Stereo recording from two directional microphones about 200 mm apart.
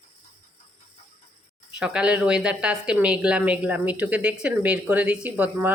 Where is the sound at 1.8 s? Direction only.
5° right (ahead or behind).